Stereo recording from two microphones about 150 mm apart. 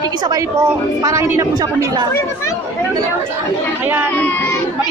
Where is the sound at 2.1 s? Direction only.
20° left (ahead or behind).